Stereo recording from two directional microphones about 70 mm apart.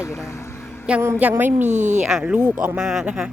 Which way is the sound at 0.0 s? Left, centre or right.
Left.